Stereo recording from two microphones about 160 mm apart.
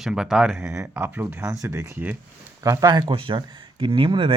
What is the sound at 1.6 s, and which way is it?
Speech, 20° right (ahead or behind).